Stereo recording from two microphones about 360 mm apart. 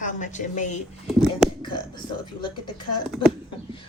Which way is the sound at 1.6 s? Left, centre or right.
Centre.